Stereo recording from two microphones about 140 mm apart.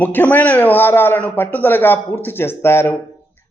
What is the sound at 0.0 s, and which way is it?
Speech, 10° left (ahead or behind).